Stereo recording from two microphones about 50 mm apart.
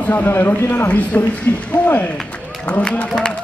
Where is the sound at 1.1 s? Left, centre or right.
Left.